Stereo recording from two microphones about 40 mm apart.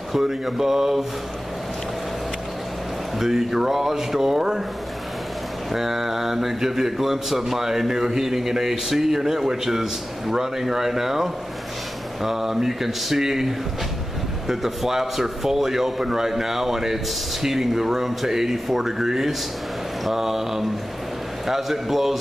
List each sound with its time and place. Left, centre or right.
0.1 s a man's voice: centre
3.2 s a man's voice: centre
5.7 s a man's voice: centre